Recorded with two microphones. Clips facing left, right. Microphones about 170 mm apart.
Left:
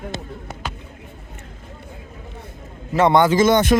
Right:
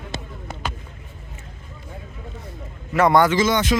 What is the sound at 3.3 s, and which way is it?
Speech, 50° left (ahead or behind).